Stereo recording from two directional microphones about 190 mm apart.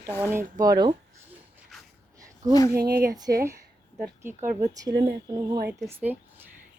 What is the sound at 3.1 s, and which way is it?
Speech, 20° right (ahead or behind).